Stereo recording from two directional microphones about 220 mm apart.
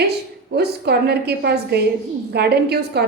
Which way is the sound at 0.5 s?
50° right (ahead or behind).